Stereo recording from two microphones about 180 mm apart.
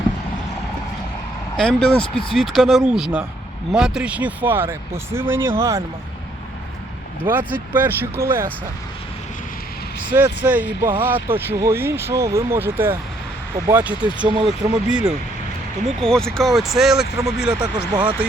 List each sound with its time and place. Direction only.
1.5 s speech: 5° left (ahead or behind); by 5.8 s 15° right (ahead or behind)
7.3 s speech: 10° right (ahead or behind)
10.1 s speech: 10° right (ahead or behind)
14.3 s speech: 25° right (ahead or behind)
14.7 s speech: 5° right (ahead or behind)